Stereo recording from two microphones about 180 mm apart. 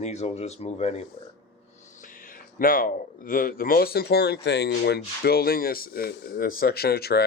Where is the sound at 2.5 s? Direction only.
50° left (ahead or behind).